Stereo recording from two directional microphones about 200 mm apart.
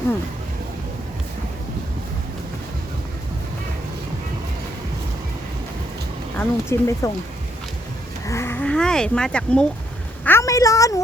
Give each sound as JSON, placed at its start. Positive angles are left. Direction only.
{"t": 6.3, "sound": "speech", "side_deg": 10}
{"t": 8.3, "sound": "speech", "side_deg": 10}